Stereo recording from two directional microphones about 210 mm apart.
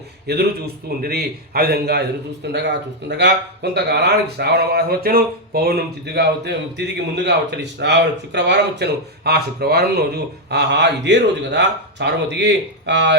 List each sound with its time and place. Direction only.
0.3 s speech: 50° right (ahead or behind)